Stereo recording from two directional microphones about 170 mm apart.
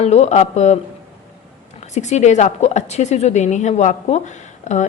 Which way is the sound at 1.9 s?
45° left (ahead or behind).